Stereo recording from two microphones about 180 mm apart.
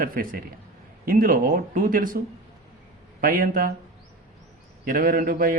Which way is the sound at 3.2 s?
50° right (ahead or behind).